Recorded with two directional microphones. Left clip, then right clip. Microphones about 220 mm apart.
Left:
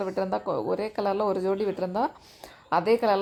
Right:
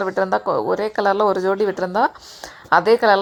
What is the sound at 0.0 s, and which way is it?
A woman's voice, 20° right (ahead or behind).